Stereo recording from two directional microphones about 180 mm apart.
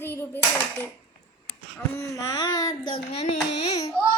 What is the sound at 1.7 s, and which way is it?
Speech, 15° left (ahead or behind).